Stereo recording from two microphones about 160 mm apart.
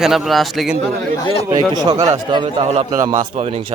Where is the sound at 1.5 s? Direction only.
25° right (ahead or behind).